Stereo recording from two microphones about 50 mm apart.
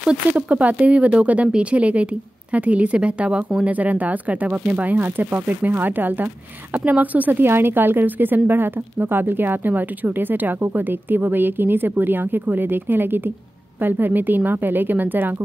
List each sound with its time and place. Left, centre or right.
0.3 s a woman's voice: right
0.6 s a woman's voice: right
7.4 s a woman's voice: right